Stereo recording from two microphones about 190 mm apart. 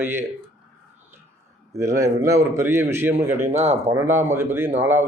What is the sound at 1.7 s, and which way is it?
Speech, 15° right (ahead or behind).